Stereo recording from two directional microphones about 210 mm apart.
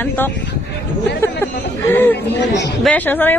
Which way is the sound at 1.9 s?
10° left (ahead or behind).